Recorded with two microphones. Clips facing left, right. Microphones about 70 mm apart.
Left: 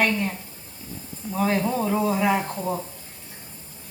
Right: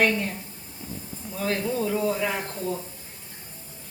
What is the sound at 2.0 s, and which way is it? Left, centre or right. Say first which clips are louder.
Speech: left 4 dB; centre.